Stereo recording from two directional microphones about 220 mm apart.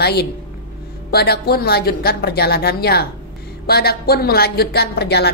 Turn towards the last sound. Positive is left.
turn(degrees=50)  # may be behind; listen again after turning